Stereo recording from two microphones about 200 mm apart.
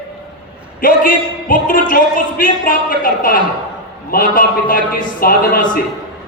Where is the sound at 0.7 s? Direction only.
45° left (ahead or behind).